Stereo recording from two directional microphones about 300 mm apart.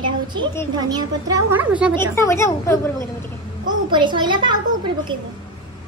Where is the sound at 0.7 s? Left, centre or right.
Centre.